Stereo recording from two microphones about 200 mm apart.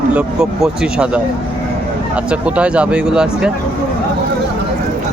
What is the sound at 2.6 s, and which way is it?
Speech, 5° right (ahead or behind).